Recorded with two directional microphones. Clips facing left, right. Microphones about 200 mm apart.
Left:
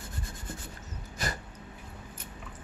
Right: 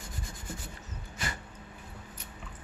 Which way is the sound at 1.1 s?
40° left (ahead or behind).